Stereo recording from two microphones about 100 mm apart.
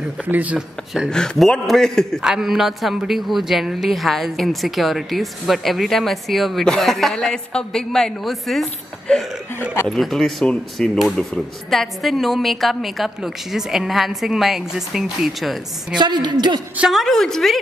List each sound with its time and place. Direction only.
0.2 s speech: 15° right (ahead or behind)
0.6 s a man's voice: 5° right (ahead or behind)
1.1 s a man's voice: 5° left (ahead or behind)
16.0 s a woman's voice: 45° right (ahead or behind)
16.9 s a man's voice: 5° left (ahead or behind)